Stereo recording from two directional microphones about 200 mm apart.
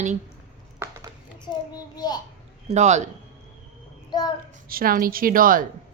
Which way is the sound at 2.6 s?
35° right (ahead or behind).